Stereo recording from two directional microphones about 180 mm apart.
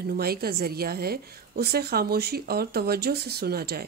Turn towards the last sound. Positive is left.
turn(degrees=-60)  # may be behind; listen again after turning